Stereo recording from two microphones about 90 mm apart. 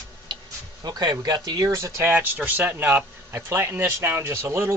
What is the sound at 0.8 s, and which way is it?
Speech, 50° right (ahead or behind).